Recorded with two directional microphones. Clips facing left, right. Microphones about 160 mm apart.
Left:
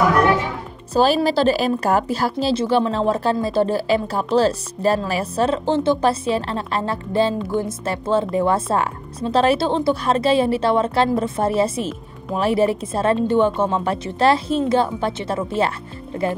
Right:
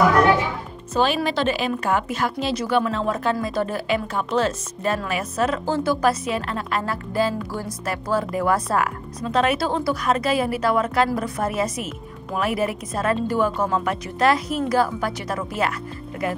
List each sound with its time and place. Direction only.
0.9 s a woman's voice: 35° left (ahead or behind)